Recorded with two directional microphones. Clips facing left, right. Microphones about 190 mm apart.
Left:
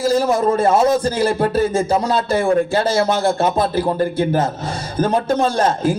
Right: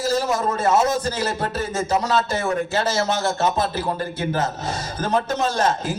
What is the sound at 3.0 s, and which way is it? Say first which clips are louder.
Speech: left 5 dB; 55° left (ahead or behind).